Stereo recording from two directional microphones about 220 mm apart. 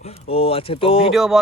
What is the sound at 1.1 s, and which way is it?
Speech, centre (ahead or behind).